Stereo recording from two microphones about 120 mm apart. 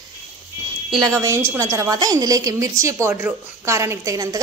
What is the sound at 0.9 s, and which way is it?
A woman's voice, 35° right (ahead or behind).